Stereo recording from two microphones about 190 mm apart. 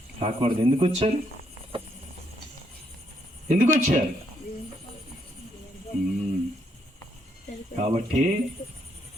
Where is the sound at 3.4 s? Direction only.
40° right (ahead or behind).